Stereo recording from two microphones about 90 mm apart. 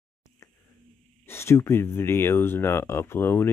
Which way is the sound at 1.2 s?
30° left (ahead or behind).